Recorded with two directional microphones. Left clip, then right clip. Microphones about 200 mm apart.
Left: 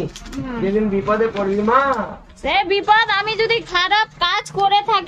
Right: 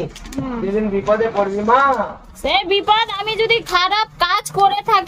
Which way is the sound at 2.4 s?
5° left (ahead or behind).